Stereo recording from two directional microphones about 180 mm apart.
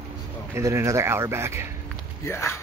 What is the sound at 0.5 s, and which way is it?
Speech, 15° right (ahead or behind).